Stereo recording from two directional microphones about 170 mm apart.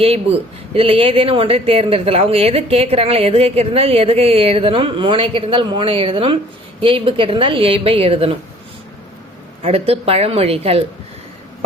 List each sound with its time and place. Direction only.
0.0 s speech: 35° right (ahead or behind)
9.6 s speech: 35° right (ahead or behind)